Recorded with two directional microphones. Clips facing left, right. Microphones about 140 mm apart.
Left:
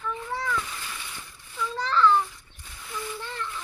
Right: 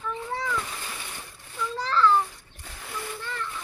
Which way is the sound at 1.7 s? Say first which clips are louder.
Even; 5° right (ahead or behind).